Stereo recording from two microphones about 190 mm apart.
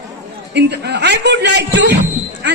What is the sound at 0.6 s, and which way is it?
Speech, 60° right (ahead or behind).